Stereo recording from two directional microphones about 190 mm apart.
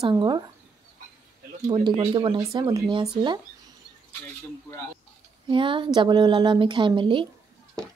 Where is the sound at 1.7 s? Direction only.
25° right (ahead or behind).